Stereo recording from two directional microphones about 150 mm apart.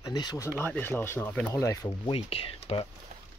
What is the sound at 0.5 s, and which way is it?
Speech, 15° left (ahead or behind).